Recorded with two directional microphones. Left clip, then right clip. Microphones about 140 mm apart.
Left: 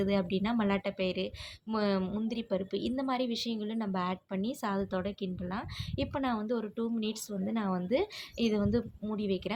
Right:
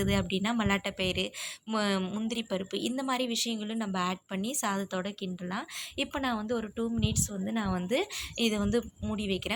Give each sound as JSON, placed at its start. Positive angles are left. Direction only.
{"t": 0.0, "sound": "a woman's voice", "side_deg": -10}